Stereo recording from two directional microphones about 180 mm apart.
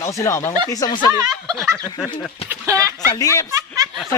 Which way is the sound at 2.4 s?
15° right (ahead or behind).